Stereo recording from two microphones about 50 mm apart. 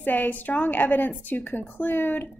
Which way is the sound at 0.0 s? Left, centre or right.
Left.